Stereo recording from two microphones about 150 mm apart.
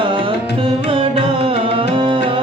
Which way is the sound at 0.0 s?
35° right (ahead or behind).